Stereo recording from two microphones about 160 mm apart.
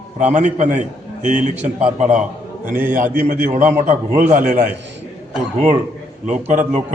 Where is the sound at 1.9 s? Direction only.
50° right (ahead or behind).